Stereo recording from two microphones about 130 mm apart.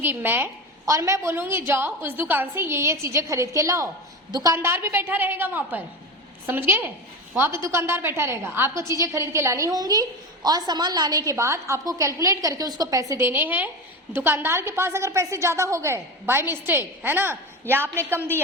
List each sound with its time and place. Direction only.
0.0 s a woman's voice: 15° right (ahead or behind)